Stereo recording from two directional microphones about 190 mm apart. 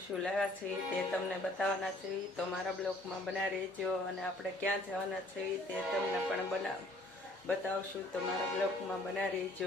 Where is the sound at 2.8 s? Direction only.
5° left (ahead or behind).